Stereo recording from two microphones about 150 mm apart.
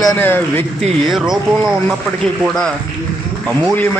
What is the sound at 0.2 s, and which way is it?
Speech, 15° left (ahead or behind).